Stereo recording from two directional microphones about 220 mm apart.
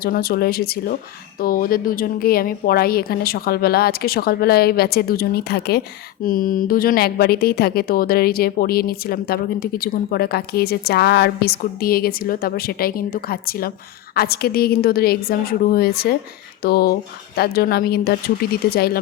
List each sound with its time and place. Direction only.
0.0 s speech: 45° left (ahead or behind)